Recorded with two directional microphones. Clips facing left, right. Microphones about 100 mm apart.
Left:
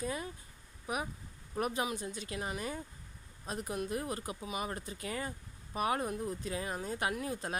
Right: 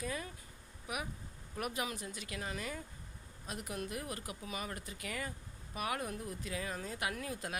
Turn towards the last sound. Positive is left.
turn(degrees=30)  # may be behind; listen again after turning